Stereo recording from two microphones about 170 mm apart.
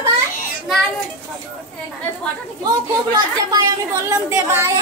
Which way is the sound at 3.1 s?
20° right (ahead or behind).